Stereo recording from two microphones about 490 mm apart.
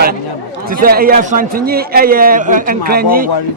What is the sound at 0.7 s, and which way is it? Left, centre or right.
A man's voice, centre.